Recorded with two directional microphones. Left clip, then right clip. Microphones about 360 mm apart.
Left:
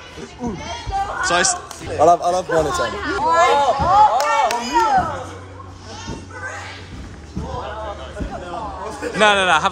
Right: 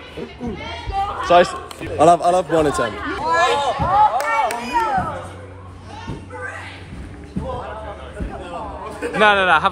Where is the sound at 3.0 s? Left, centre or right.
Left.